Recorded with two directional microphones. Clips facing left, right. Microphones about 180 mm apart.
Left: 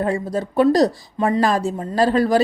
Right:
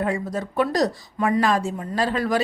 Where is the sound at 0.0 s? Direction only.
30° left (ahead or behind).